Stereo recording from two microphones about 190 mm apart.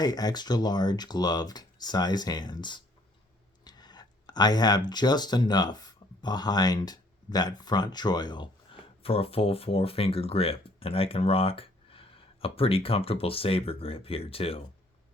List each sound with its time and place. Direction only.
0.0 s speech: 20° left (ahead or behind)